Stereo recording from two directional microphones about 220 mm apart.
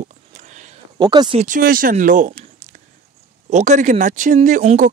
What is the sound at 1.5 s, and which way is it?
Speech, 40° right (ahead or behind).